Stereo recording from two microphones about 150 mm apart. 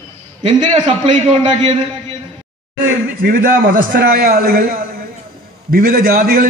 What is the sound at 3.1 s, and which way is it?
A man's voice, 75° right (ahead or behind).